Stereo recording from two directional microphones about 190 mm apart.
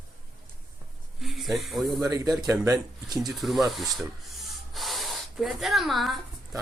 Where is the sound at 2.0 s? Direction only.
20° right (ahead or behind).